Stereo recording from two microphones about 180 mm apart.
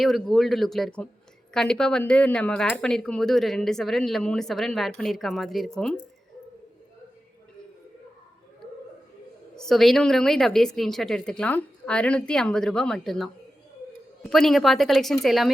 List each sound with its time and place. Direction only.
0.0 s speech: centre (ahead or behind)
9.6 s speech: centre (ahead or behind)